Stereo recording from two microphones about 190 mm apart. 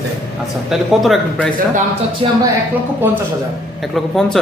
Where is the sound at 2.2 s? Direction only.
30° right (ahead or behind).